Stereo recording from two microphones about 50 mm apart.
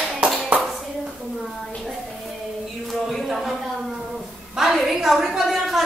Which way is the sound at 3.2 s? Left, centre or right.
Centre.